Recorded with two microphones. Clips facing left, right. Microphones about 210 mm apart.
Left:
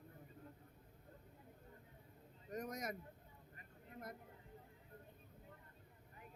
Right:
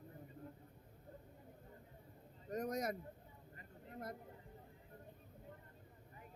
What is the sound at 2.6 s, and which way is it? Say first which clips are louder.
Speech: right 8 dB; 35° right (ahead or behind).